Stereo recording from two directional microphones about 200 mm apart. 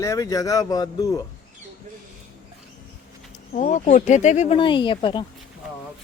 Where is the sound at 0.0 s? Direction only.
15° left (ahead or behind).